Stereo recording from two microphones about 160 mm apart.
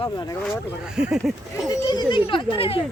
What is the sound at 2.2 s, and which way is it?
Speech, 30° left (ahead or behind).